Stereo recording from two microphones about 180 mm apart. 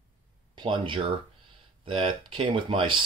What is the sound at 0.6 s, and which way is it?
Speech, 25° right (ahead or behind).